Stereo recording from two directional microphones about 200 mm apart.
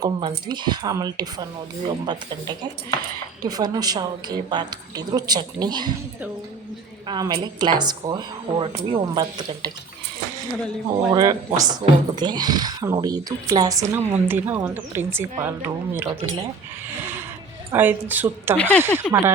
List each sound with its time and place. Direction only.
0.0 s speech: 20° right (ahead or behind)
7.1 s speech: 20° right (ahead or behind)
10.8 s speech: 20° right (ahead or behind)
17.7 s speech: 10° right (ahead or behind)
18.5 s speech: 5° left (ahead or behind)
18.8 s speech: 10° right (ahead or behind)